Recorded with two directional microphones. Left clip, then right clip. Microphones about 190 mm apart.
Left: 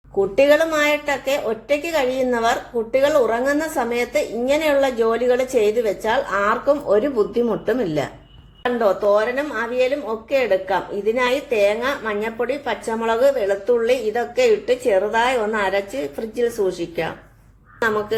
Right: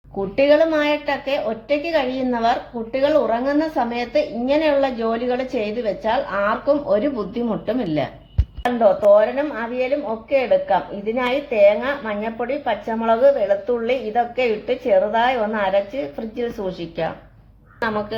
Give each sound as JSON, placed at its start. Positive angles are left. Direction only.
{"t": 0.3, "sound": "a woman's voice", "side_deg": 35}
{"t": 8.8, "sound": "a woman's voice", "side_deg": 25}